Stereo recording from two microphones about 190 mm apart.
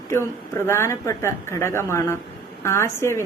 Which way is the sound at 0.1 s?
15° left (ahead or behind).